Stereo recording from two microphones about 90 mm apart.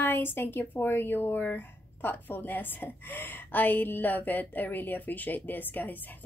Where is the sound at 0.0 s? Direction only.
25° left (ahead or behind).